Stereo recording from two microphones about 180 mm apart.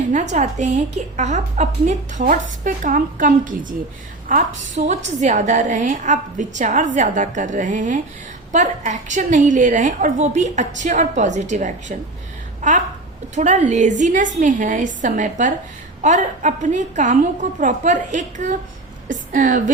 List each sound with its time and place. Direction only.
0.1 s a woman's voice: 40° right (ahead or behind)